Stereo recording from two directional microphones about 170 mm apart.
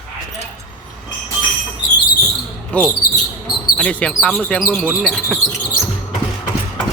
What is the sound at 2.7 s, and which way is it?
Speech, 10° left (ahead or behind).